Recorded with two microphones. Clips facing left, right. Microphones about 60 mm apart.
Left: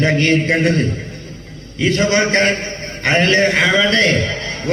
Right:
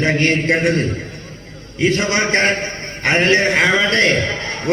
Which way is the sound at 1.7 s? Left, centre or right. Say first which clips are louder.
Left 2 dB; right.